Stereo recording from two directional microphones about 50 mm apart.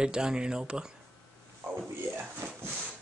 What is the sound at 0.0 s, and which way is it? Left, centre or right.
Speech, centre.